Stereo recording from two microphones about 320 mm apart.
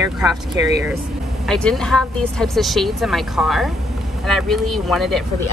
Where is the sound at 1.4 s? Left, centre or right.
Centre.